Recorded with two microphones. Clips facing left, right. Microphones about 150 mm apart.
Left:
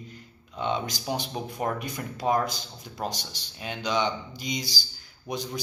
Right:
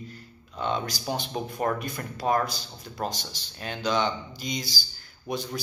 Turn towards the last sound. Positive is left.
turn(degrees=15)  # may be behind; listen again after turning